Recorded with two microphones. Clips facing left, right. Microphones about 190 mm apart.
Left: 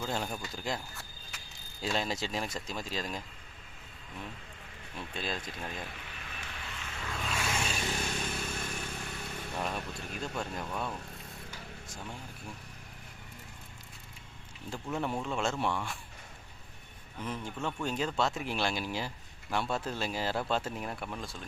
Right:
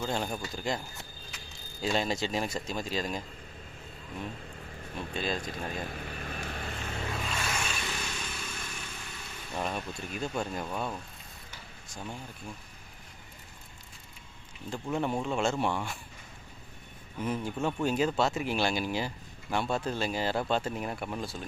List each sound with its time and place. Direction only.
0.0 s speech: centre (ahead or behind)
1.8 s speech: centre (ahead or behind)
5.1 s speech: centre (ahead or behind)
5.4 s vehicle: 40° right (ahead or behind)
7.2 s vehicle: centre (ahead or behind)
7.4 s a sound: 30° left (ahead or behind)
7.8 s vehicle: 45° left (ahead or behind)
8.4 s vehicle: 40° left (ahead or behind)
9.6 s speech: centre (ahead or behind)
15.0 s speech: centre (ahead or behind)
17.2 s speech: 10° right (ahead or behind)